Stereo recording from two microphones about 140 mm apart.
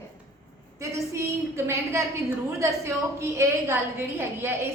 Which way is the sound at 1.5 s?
20° right (ahead or behind).